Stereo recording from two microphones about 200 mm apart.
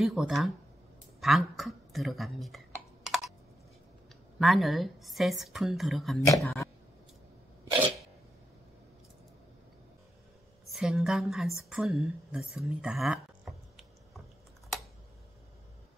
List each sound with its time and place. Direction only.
0.0 s speech: centre (ahead or behind)
1.2 s a sound: centre (ahead or behind)
4.4 s speech: centre (ahead or behind)
6.2 s speech: 15° left (ahead or behind)
10.7 s a woman's voice: centre (ahead or behind)